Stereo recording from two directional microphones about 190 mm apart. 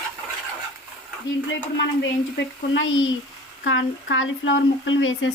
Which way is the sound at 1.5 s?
70° left (ahead or behind).